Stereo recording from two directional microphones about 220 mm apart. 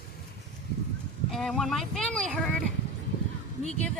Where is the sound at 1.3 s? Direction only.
Centre (ahead or behind).